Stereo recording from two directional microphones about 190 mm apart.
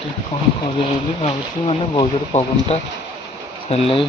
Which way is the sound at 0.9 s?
30° left (ahead or behind).